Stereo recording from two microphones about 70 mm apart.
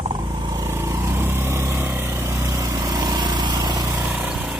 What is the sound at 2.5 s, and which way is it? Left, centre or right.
Vehicle, right.